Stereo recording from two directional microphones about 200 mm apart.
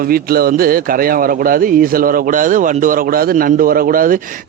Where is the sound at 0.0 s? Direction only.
50° right (ahead or behind).